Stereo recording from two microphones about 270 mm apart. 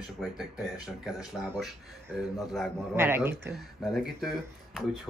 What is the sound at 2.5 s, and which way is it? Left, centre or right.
Speech, centre.